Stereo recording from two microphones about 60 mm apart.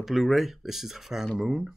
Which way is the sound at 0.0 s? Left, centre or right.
Centre.